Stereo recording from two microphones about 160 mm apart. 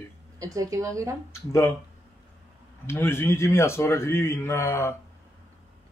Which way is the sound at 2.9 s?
15° left (ahead or behind).